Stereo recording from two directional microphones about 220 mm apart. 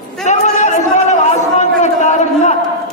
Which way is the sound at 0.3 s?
35° left (ahead or behind).